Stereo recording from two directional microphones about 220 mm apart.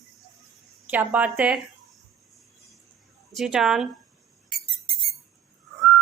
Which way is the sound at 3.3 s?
Centre (ahead or behind).